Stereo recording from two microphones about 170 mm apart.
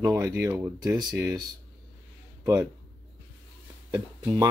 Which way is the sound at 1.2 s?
20° right (ahead or behind).